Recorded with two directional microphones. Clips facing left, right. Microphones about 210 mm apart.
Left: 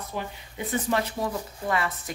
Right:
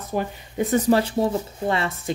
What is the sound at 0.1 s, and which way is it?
Speech, 45° right (ahead or behind).